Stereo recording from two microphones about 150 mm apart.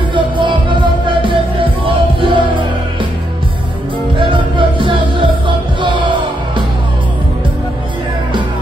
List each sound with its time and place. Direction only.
0.1 s music: 35° right (ahead or behind)
4.2 s music: 35° right (ahead or behind)